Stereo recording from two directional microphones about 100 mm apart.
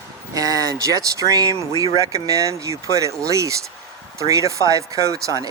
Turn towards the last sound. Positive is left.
turn(degrees=-35)  # may be behind; listen again after turning